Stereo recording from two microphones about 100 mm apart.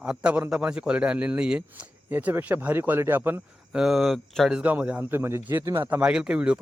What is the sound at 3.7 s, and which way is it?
Speech, centre (ahead or behind).